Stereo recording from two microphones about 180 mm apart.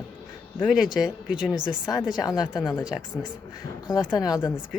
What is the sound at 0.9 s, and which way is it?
Speech, 5° right (ahead or behind).